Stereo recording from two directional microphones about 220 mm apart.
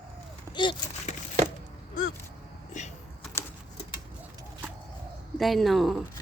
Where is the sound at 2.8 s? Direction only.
35° left (ahead or behind).